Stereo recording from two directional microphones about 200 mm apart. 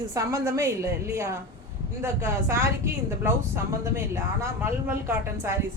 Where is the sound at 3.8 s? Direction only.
15° right (ahead or behind).